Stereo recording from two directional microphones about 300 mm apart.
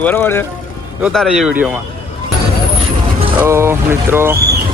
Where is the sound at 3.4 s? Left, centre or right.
Centre.